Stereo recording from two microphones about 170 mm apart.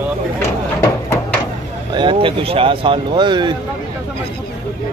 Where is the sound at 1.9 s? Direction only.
30° right (ahead or behind).